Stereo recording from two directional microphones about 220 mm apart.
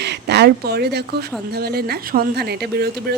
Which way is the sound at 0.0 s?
50° right (ahead or behind).